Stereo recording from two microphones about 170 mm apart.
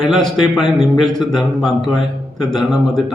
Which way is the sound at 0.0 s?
Centre (ahead or behind).